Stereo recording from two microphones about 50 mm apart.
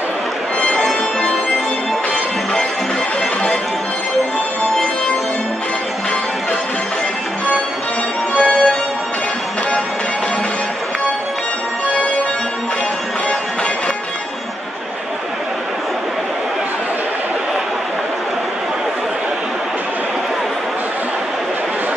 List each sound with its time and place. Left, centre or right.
0.6 s music: centre
8.4 s music: left